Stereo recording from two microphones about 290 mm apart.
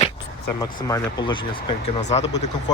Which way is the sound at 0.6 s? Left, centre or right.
Centre.